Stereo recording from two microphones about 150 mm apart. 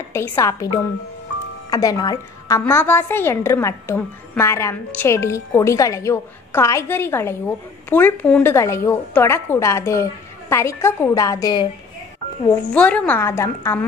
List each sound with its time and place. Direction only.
0.1 s a woman's voice: 15° left (ahead or behind)
2.6 s a woman's voice: 15° left (ahead or behind)
12.7 s a woman's voice: 10° left (ahead or behind)